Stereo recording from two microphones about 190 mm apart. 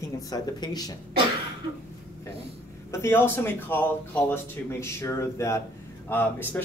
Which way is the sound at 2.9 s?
10° left (ahead or behind).